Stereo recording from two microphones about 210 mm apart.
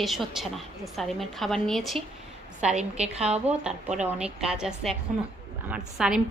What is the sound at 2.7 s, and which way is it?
Speech, 30° right (ahead or behind).